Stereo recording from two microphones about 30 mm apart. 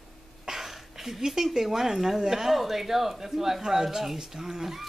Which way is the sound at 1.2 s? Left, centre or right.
Centre.